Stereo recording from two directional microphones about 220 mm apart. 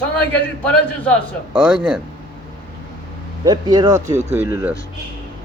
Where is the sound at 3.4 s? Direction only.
20° right (ahead or behind).